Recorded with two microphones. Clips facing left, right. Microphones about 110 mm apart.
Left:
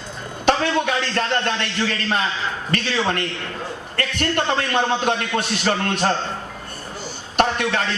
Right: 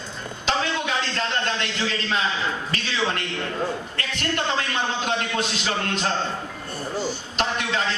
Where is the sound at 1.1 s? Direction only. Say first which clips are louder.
Left 4 dB; 55° left (ahead or behind).